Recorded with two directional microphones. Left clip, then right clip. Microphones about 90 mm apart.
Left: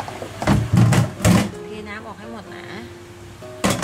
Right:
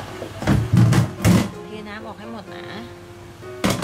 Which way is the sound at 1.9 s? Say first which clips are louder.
Left 1 dB; 10° right (ahead or behind).